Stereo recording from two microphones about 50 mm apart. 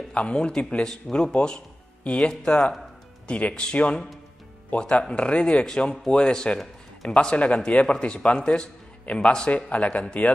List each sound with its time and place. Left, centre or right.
0.1 s a man's voice: left
2.6 s speech: centre
3.3 s a man's voice: left
6.6 s a sound: centre
7.2 s a man's voice: left